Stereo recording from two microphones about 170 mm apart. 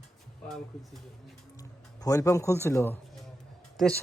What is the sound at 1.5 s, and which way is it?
Speech, 20° left (ahead or behind).